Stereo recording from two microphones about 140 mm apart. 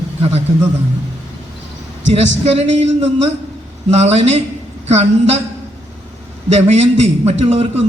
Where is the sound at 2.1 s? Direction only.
45° right (ahead or behind).